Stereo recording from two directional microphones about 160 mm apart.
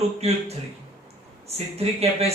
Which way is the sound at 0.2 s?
40° right (ahead or behind).